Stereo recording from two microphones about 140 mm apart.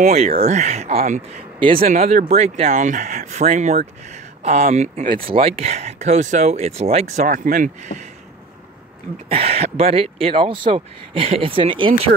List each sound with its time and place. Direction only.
0.0 s speech: 50° right (ahead or behind)
2.7 s speech: 65° right (ahead or behind)
5.2 s speech: 45° right (ahead or behind)
7.2 s speech: 70° right (ahead or behind)
9.3 s speech: 45° right (ahead or behind)